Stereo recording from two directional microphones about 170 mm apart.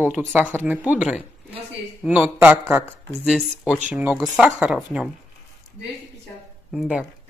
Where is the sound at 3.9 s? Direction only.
10° right (ahead or behind).